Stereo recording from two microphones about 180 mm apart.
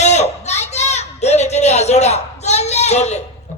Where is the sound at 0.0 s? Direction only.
35° left (ahead or behind).